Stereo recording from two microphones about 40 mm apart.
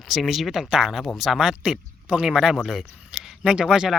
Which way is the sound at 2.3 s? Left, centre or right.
Centre.